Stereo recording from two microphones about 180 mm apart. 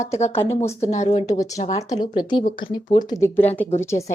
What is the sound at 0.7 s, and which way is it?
Speech, 40° left (ahead or behind).